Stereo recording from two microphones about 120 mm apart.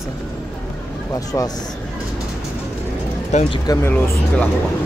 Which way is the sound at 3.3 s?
70° left (ahead or behind).